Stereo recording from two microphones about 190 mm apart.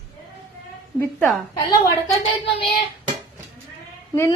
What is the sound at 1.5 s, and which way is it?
Speech, 15° left (ahead or behind).